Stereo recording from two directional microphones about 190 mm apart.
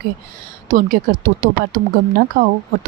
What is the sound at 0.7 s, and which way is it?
Speech, 45° right (ahead or behind).